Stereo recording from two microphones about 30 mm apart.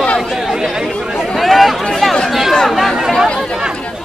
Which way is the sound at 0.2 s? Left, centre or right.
Centre.